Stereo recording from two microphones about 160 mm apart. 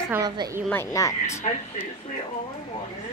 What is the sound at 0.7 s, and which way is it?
Speech, 15° left (ahead or behind).